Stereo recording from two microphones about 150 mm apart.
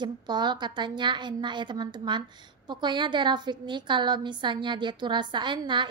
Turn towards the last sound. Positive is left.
turn(degrees=-30)  # may be behind; listen again after turning